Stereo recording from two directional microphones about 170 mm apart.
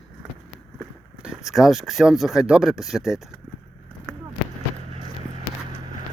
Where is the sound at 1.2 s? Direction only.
5° right (ahead or behind).